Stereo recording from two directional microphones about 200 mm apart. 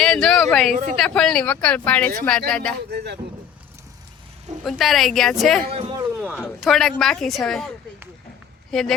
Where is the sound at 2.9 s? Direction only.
55° right (ahead or behind).